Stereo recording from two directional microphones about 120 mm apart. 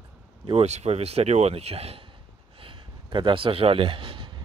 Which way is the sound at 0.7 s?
65° right (ahead or behind).